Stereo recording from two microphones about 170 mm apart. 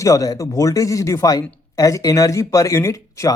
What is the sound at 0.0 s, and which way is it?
Speech, 20° left (ahead or behind).